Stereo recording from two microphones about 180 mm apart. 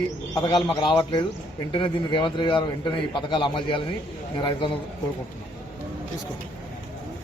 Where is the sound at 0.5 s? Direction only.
25° left (ahead or behind).